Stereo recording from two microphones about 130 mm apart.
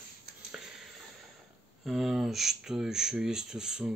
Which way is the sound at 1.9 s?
Centre (ahead or behind).